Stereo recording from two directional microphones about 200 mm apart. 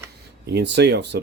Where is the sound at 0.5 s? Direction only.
60° right (ahead or behind).